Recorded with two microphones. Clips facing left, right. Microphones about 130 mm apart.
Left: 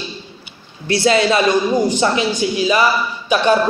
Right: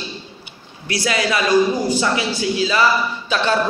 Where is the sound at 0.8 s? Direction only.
25° left (ahead or behind).